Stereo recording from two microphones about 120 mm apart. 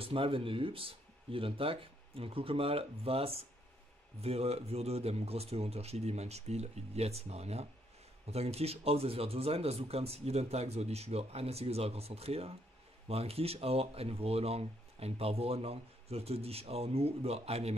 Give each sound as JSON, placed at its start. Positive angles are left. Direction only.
{"t": 0.0, "sound": "speech", "side_deg": -50}